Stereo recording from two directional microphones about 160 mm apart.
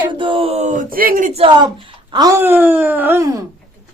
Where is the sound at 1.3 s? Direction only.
30° right (ahead or behind).